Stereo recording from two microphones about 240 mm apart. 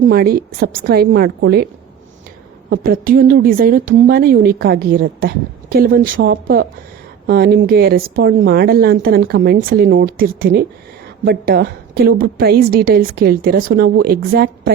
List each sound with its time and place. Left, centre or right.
0.1 s a woman's voice: right
2.6 s a woman's voice: right